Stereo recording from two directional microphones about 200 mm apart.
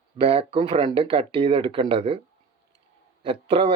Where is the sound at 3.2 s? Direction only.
25° right (ahead or behind).